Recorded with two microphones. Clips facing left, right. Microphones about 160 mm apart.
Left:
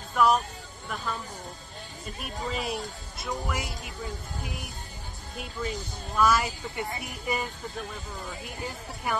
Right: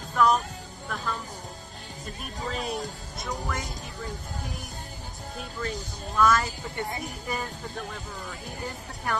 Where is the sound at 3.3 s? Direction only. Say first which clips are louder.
Left 1 dB; 10° left (ahead or behind).